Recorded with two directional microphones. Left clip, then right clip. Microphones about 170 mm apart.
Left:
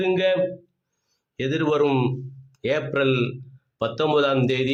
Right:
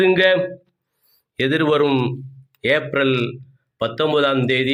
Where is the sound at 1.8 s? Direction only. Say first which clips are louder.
Right 3 dB; 5° right (ahead or behind).